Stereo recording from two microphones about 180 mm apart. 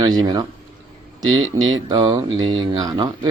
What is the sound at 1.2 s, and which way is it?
Speech, 90° right.